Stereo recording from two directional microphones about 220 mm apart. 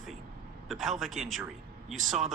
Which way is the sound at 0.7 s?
Centre (ahead or behind).